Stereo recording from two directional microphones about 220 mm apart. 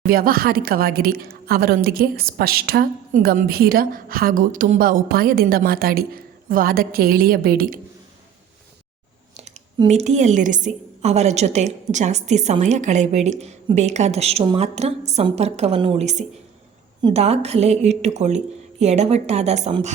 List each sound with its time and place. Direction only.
0.0 s a woman's voice: 40° right (ahead or behind)
9.3 s a woman's voice: 30° right (ahead or behind)